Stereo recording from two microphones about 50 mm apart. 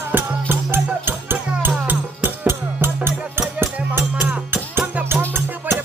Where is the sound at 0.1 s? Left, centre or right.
Right.